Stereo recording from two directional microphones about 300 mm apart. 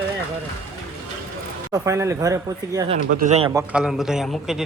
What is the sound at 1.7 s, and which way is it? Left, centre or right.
Speech, centre.